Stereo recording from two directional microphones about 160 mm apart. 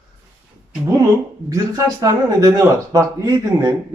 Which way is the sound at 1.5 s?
20° right (ahead or behind).